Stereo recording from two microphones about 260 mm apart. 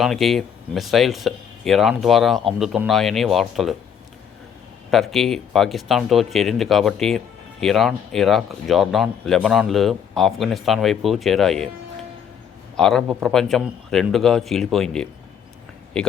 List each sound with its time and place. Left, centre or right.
0.0 s speech: centre
4.9 s speech: centre
12.7 s speech: centre